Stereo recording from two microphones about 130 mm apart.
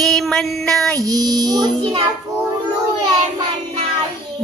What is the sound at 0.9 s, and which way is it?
Child singing, 30° right (ahead or behind).